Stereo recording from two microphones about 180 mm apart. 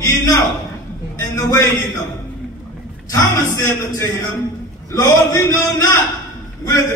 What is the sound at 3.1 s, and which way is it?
Speech, 15° left (ahead or behind).